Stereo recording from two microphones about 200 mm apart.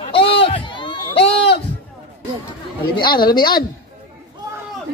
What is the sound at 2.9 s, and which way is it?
Speech, 25° left (ahead or behind).